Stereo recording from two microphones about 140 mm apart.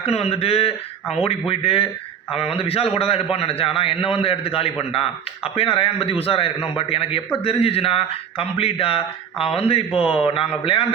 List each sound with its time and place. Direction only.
0.0 s a man's voice: 45° left (ahead or behind)